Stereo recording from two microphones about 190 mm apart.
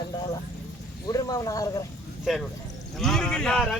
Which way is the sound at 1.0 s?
20° left (ahead or behind).